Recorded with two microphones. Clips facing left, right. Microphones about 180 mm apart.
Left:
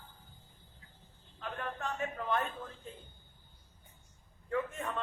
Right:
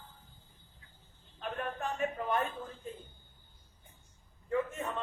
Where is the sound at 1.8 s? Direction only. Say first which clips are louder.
Right 4 dB; 15° right (ahead or behind).